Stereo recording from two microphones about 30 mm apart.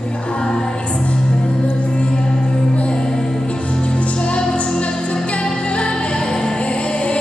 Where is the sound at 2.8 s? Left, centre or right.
Left.